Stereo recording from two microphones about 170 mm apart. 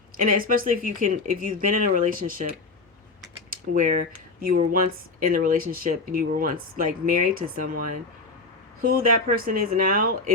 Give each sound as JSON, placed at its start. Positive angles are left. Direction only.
{"t": 0.2, "sound": "speech", "side_deg": -55}
{"t": 3.5, "sound": "speech", "side_deg": -50}
{"t": 8.8, "sound": "speech", "side_deg": -60}